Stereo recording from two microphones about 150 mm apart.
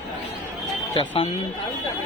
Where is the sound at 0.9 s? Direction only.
35° left (ahead or behind).